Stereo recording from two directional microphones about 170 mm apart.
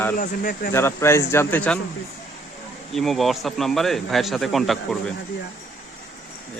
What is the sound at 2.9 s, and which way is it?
Speech, centre (ahead or behind).